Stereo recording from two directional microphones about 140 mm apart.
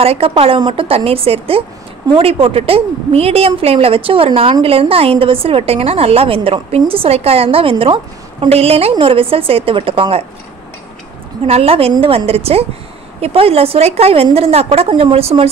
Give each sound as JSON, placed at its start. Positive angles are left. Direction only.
{"t": 0.0, "sound": "a woman's voice", "side_deg": -45}
{"t": 11.4, "sound": "a woman's voice", "side_deg": -45}